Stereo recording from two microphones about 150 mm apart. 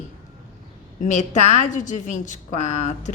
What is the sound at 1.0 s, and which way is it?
A woman's voice, 55° left (ahead or behind).